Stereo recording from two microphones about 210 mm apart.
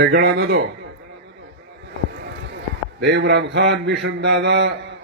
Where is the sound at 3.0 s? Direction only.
55° right (ahead or behind).